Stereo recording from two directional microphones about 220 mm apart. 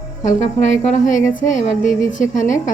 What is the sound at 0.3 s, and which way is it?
Speech, 30° left (ahead or behind).